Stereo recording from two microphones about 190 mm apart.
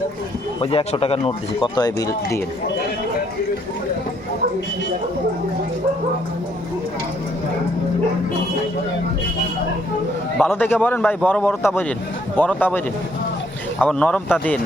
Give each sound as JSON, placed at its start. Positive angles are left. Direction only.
{"t": 0.6, "sound": "speech", "side_deg": 30}
{"t": 10.3, "sound": "a man's voice", "side_deg": 10}